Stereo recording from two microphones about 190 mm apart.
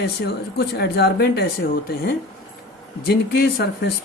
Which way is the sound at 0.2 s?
55° left (ahead or behind).